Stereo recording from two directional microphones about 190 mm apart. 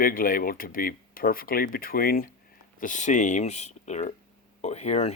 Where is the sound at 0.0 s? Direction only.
50° left (ahead or behind).